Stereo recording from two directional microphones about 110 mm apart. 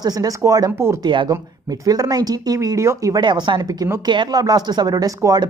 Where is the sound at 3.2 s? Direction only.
45° right (ahead or behind).